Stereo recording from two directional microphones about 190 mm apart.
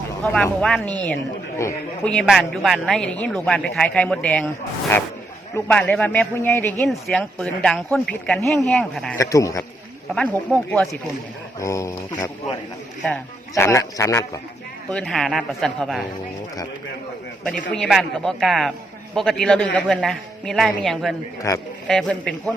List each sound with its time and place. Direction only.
0.3 s speech: 5° left (ahead or behind)
5.5 s speech: 10° left (ahead or behind)
9.1 s speech: 15° left (ahead or behind)
10.2 s speech: 5° left (ahead or behind)
11.6 s speech: 15° left (ahead or behind)
13.0 s speech: 10° left (ahead or behind)
14.8 s speech: 5° left (ahead or behind)
17.7 s speech: centre (ahead or behind)
21.5 s speech: 15° left (ahead or behind)
21.8 s speech: 5° left (ahead or behind)